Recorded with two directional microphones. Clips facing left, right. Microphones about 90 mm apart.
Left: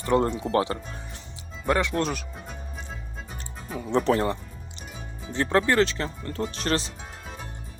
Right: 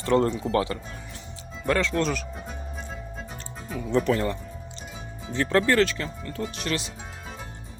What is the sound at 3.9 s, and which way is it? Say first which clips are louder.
Speech: left 1 dB; 30° left (ahead or behind).